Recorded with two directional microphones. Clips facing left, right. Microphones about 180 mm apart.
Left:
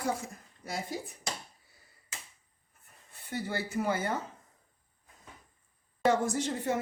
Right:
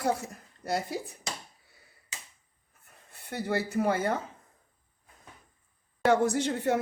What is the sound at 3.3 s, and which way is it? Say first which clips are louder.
Speech: right 4 dB; 60° right (ahead or behind).